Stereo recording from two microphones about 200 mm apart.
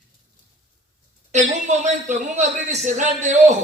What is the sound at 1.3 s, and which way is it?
A man's voice, 35° right (ahead or behind).